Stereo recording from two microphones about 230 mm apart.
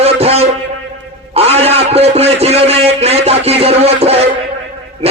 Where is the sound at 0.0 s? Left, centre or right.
Right.